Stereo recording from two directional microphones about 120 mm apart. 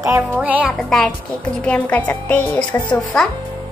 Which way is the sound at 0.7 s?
Centre (ahead or behind).